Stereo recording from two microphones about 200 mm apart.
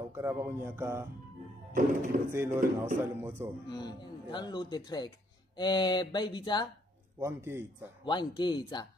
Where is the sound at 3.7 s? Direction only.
20° left (ahead or behind).